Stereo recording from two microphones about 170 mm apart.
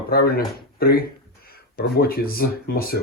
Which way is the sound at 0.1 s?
65° left (ahead or behind).